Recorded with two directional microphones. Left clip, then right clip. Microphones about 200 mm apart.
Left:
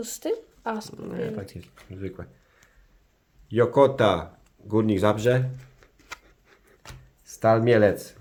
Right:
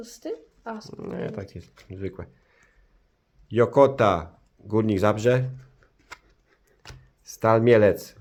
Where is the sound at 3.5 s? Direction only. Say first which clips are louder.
Right 1 dB; 30° right (ahead or behind).